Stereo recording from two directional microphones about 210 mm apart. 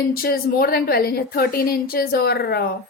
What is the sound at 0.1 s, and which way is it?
Speech, 45° left (ahead or behind).